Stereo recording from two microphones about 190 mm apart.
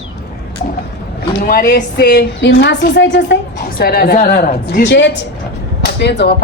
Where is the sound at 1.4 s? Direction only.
50° left (ahead or behind); by 3.4 s 70° left (ahead or behind).